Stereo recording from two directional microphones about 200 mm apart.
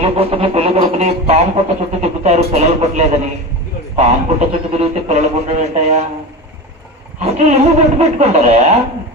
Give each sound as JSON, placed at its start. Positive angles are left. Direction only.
{"t": 0.0, "sound": "a sound", "side_deg": -30}
{"t": 2.0, "sound": "speech", "side_deg": -30}
{"t": 7.2, "sound": "speech", "side_deg": -30}